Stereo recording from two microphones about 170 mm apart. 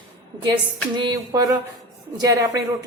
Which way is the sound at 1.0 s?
25° right (ahead or behind).